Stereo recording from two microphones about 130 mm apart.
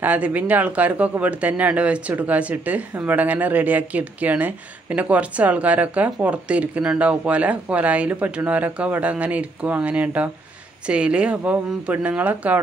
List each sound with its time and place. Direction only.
0.0 s speech: 10° right (ahead or behind)